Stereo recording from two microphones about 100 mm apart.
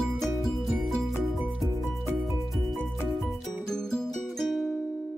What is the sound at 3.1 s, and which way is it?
Music, centre (ahead or behind).